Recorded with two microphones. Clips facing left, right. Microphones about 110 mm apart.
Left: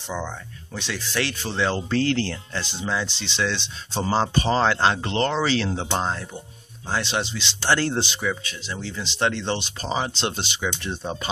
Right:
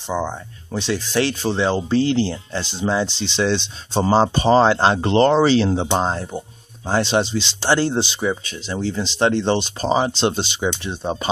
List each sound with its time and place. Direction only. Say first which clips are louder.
0.1 s speech: right 7 dB; 20° right (ahead or behind)
7.6 s speech: right 3 dB; 20° right (ahead or behind)